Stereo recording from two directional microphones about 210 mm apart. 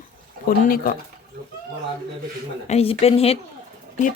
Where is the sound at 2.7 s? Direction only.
30° left (ahead or behind).